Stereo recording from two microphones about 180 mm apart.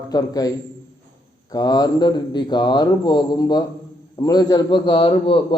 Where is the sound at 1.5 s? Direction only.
20° left (ahead or behind).